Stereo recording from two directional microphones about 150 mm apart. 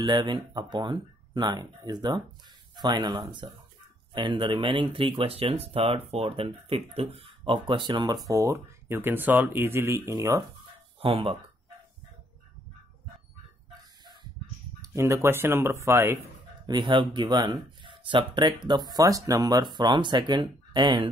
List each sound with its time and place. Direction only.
0.0 s speech: 30° right (ahead or behind)
11.0 s speech: 40° right (ahead or behind)
14.8 s speech: 20° right (ahead or behind)
16.6 s speech: 30° right (ahead or behind)